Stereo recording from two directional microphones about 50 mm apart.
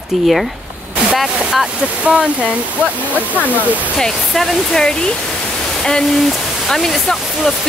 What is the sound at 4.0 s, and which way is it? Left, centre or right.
Speech, centre.